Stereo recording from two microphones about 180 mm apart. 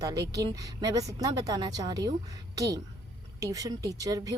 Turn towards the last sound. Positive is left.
turn(degrees=-20)  # may be behind; listen again after turning